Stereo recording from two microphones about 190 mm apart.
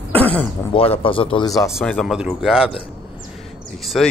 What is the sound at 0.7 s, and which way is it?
Speech, 30° left (ahead or behind).